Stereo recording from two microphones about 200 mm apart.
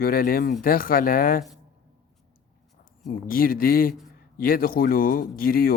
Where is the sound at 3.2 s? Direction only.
45° left (ahead or behind).